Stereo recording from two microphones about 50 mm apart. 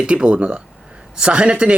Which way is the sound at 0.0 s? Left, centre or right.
Right.